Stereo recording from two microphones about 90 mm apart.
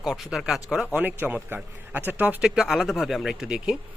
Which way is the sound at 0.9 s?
20° right (ahead or behind).